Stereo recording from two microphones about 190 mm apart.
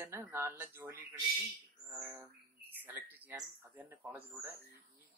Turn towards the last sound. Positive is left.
turn(degrees=-15)  # may be behind; listen again after turning